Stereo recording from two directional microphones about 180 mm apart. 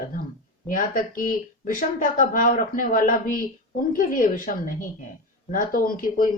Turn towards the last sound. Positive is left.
turn(degrees=50)  # may be behind; listen again after turning